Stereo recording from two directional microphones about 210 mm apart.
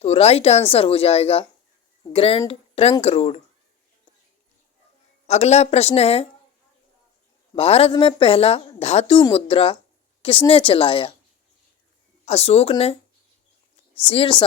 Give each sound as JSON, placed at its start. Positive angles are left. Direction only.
{"t": 0.0, "sound": "a woman's voice", "side_deg": 30}
{"t": 5.2, "sound": "speech", "side_deg": 30}
{"t": 7.5, "sound": "a woman's voice", "side_deg": 25}
{"t": 12.2, "sound": "a woman's voice", "side_deg": 30}
{"t": 14.1, "sound": "a woman's voice", "side_deg": 25}